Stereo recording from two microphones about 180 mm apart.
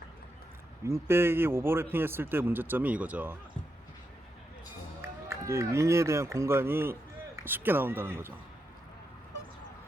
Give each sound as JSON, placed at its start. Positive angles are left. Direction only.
{"t": 0.9, "sound": "a man's voice", "side_deg": -15}
{"t": 5.5, "sound": "a man's voice", "side_deg": -15}